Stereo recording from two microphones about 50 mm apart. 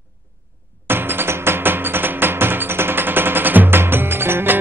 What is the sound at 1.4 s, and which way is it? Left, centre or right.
Music, right.